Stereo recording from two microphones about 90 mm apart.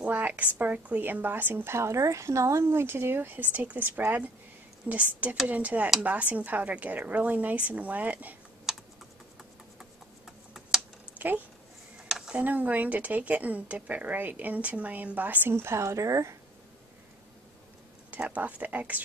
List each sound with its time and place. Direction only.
0.0 s a sound: 15° right (ahead or behind)
0.6 s a woman's voice: 15° right (ahead or behind)
8.7 s computer keyboard: 5° right (ahead or behind)
11.1 s a woman's voice: 20° right (ahead or behind); by 16.3 s 35° right (ahead or behind)
18.1 s a woman's voice: 15° right (ahead or behind)